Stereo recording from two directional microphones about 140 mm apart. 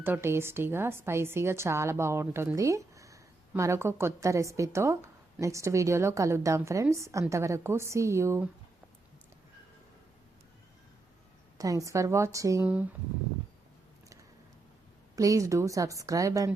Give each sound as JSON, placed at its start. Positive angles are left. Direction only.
{"t": 0.0, "sound": "a woman's voice", "side_deg": -15}
{"t": 11.5, "sound": "a woman's voice", "side_deg": -25}
{"t": 12.6, "sound": "speech", "side_deg": -10}
{"t": 15.1, "sound": "a woman's voice", "side_deg": -25}